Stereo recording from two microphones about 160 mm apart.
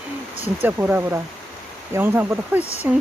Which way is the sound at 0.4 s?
15° right (ahead or behind).